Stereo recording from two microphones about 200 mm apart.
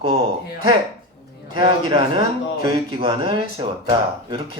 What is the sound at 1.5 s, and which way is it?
Speech, 25° right (ahead or behind).